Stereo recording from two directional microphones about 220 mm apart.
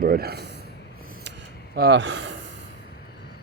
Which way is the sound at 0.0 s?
45° right (ahead or behind).